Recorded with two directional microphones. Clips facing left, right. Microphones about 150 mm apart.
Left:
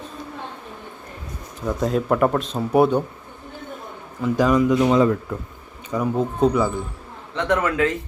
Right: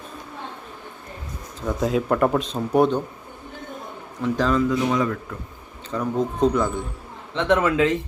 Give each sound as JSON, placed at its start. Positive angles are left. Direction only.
{"t": 1.6, "sound": "speech", "side_deg": 0}
{"t": 4.2, "sound": "speech", "side_deg": 10}
{"t": 4.9, "sound": "speech", "side_deg": 25}
{"t": 5.9, "sound": "speech", "side_deg": 10}
{"t": 7.3, "sound": "a man's voice", "side_deg": -20}